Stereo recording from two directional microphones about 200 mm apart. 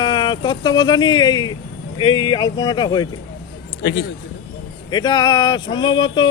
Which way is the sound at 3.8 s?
55° left (ahead or behind).